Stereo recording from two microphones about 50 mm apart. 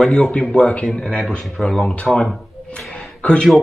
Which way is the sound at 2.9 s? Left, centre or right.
Left.